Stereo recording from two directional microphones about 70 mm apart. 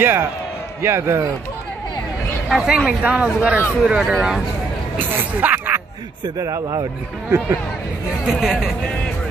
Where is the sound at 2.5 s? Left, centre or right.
Centre.